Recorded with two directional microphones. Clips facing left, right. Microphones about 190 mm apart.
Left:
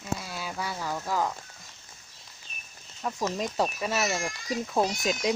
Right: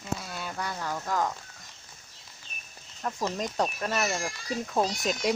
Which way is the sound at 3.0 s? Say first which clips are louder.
Left 1 dB; 5° left (ahead or behind).